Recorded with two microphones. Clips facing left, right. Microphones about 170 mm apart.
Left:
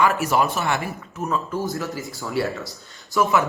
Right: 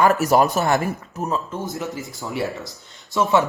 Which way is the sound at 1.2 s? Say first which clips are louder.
Left 1 dB; 20° right (ahead or behind).